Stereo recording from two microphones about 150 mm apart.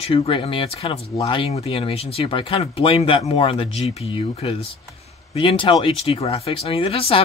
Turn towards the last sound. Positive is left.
turn(degrees=40)  # may be behind; listen again after turning